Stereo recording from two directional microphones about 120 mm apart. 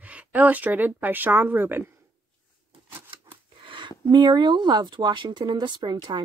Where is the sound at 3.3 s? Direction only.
45° right (ahead or behind).